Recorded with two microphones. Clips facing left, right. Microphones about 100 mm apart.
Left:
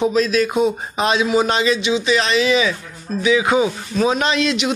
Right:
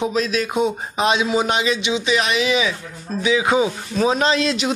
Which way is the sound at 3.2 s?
25° right (ahead or behind).